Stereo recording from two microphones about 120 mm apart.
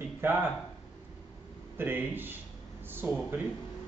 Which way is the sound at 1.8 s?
15° right (ahead or behind).